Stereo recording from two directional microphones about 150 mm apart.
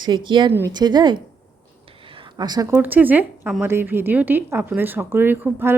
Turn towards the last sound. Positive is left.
turn(degrees=-15)  # may be behind; listen again after turning